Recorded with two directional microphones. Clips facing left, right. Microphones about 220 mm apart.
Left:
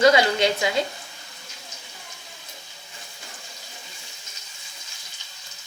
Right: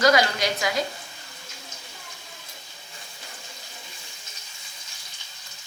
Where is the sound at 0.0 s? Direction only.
25° left (ahead or behind).